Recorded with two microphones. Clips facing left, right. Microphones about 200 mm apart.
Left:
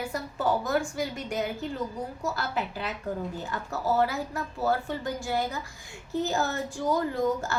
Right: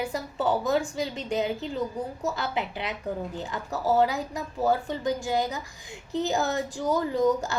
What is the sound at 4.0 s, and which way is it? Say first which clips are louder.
A woman's voice: right 2 dB; 15° right (ahead or behind).